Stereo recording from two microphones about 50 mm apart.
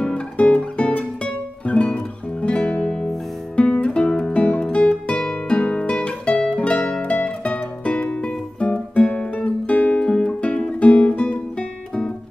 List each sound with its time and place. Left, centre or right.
0.0 s music: left
9.9 s guitar: centre